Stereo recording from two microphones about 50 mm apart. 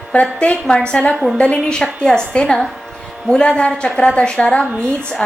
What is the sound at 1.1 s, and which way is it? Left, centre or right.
Speech, centre.